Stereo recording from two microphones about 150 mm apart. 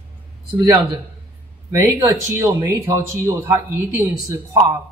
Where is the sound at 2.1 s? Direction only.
15° right (ahead or behind).